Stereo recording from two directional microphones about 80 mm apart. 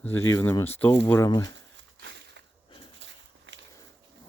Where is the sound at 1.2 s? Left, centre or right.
Left.